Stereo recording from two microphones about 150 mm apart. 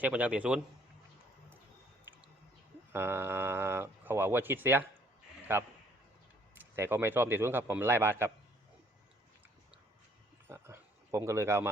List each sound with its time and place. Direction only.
0.0 s speech: 10° right (ahead or behind)
2.9 s speech: 15° right (ahead or behind)
10.5 s speech: 15° right (ahead or behind)